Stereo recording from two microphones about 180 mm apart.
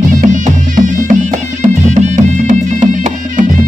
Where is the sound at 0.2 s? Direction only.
45° right (ahead or behind).